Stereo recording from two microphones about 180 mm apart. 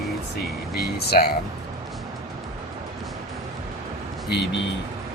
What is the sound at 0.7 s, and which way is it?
Speech, 60° left (ahead or behind).